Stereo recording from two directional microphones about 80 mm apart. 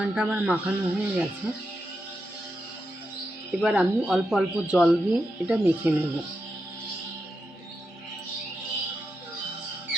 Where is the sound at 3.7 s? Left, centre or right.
Centre.